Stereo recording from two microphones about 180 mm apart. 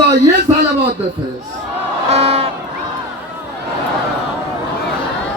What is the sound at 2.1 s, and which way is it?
Crowd, 35° right (ahead or behind).